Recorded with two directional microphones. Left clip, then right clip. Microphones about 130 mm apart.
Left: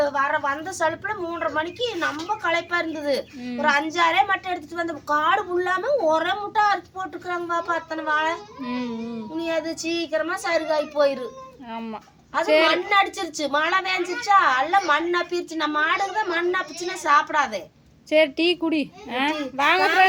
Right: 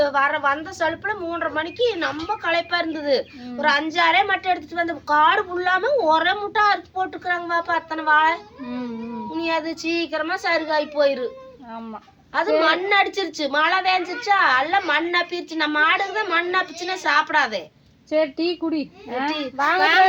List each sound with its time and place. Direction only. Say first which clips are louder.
0.0 s a woman's voice: right 3 dB; 10° left (ahead or behind)
12.3 s a woman's voice: even; 15° left (ahead or behind)
18.6 s a woman's voice: left 1 dB; 45° left (ahead or behind)
19.8 s a woman's voice: right 4 dB; 15° left (ahead or behind)